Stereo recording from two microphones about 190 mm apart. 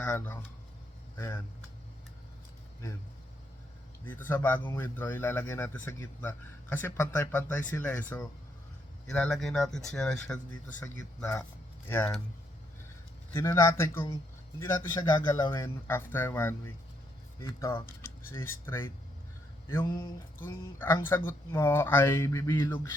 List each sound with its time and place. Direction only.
0.0 s a man's voice: 10° left (ahead or behind)
4.0 s a man's voice: 10° left (ahead or behind)
13.3 s a man's voice: 20° left (ahead or behind)
18.0 s a sound: 10° left (ahead or behind)
18.6 s a man's voice: 10° left (ahead or behind)
19.8 s a sound: 25° left (ahead or behind)
20.4 s a man's voice: 10° left (ahead or behind)